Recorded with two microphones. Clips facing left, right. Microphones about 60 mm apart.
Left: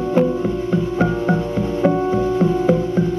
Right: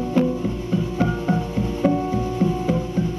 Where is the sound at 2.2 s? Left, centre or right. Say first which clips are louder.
Left 5 dB; left.